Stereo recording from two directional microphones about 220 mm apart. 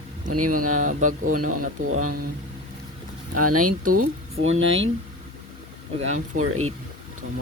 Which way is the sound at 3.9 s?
75° right (ahead or behind).